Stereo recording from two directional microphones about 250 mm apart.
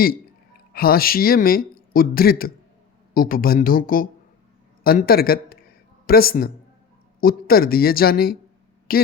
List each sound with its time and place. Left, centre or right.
0.7 s speech: left